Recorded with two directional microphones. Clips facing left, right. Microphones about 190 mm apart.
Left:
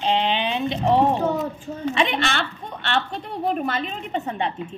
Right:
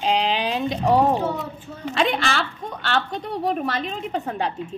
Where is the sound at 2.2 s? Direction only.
Centre (ahead or behind).